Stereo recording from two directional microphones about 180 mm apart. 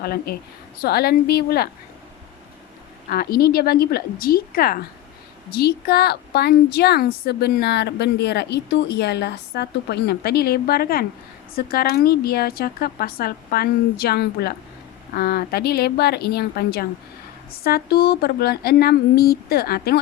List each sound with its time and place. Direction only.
0.0 s a woman's voice: 60° left (ahead or behind)
3.1 s a woman's voice: 55° left (ahead or behind)